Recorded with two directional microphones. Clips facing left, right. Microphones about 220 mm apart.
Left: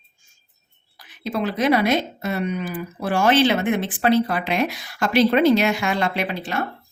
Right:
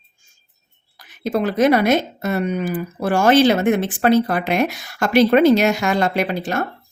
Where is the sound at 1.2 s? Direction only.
45° right (ahead or behind).